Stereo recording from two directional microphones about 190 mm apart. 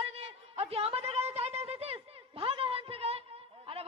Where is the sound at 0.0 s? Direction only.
30° right (ahead or behind).